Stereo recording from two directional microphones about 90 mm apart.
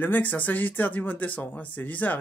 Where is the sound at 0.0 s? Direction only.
20° left (ahead or behind).